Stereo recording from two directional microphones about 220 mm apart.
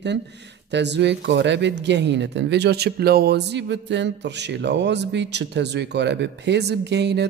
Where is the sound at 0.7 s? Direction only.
50° right (ahead or behind).